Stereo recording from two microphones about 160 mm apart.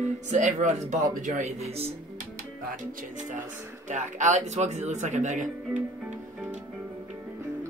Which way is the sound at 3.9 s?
50° right (ahead or behind).